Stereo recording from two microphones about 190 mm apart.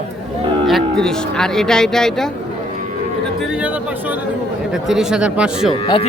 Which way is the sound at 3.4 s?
5° right (ahead or behind).